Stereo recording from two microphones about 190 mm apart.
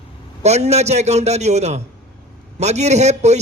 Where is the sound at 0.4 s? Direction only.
35° right (ahead or behind).